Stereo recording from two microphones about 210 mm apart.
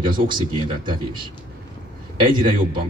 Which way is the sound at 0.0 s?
20° right (ahead or behind).